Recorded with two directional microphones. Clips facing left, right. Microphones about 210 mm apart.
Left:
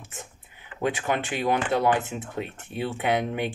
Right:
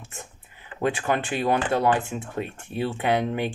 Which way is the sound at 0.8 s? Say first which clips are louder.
Right 2 dB; 15° left (ahead or behind).